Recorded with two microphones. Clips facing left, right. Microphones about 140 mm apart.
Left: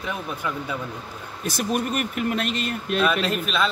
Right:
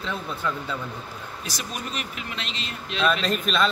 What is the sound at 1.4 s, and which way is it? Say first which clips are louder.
Speech: left 11 dB; 55° left (ahead or behind).